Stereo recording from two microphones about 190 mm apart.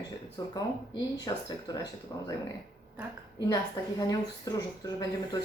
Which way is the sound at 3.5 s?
20° left (ahead or behind).